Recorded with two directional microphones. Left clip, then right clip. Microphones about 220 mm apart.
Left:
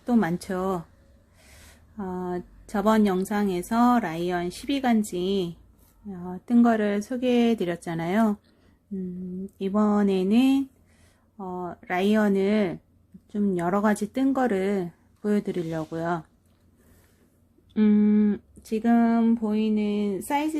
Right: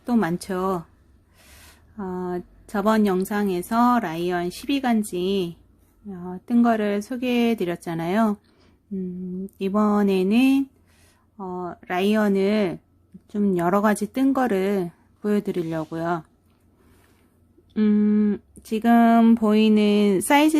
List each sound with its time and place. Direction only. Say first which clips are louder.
0.0 s a woman's voice: right 1 dB; 10° right (ahead or behind)
2.0 s a woman's voice: right 2 dB; 10° right (ahead or behind)
9.6 s a woman's voice: right 3 dB; 15° right (ahead or behind)
17.7 s speech: right 1 dB; 5° right (ahead or behind); by 20.6 s 35° right (ahead or behind)